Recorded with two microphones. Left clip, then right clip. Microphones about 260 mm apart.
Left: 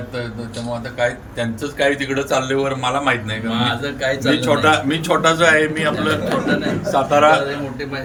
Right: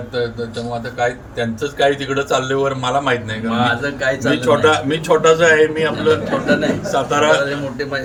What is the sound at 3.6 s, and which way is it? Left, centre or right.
Speech, centre.